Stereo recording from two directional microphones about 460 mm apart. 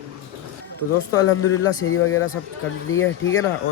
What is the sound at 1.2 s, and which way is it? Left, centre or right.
Speech, left.